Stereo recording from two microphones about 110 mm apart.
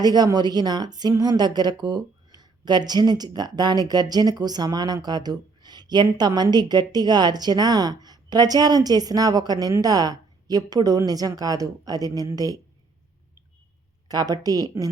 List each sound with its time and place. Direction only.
0.0 s a woman's voice: 40° right (ahead or behind)
14.1 s a woman's voice: 35° right (ahead or behind)